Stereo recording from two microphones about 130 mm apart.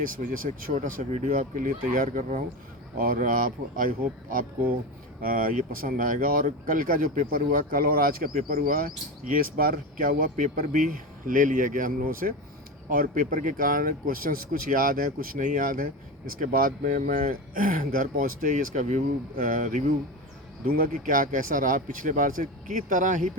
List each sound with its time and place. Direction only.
0.0 s speech: 90° right
20.9 s speech: 90° right